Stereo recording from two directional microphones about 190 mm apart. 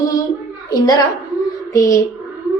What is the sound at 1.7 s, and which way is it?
Speech, 15° left (ahead or behind).